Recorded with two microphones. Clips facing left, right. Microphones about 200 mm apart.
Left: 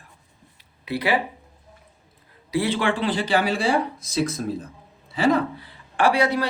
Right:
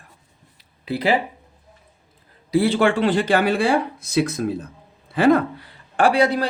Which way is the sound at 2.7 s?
50° right (ahead or behind).